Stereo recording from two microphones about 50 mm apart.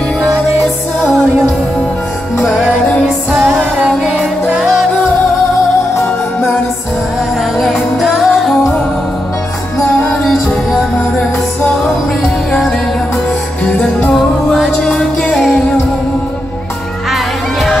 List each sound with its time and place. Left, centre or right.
3.3 s music: centre
7.6 s music: centre
10.0 s music: centre
13.7 s music: left
14.1 s music: centre
14.9 s music: centre
17.1 s music: centre